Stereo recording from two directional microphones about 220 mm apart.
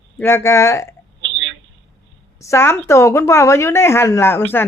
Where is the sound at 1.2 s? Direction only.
60° right (ahead or behind).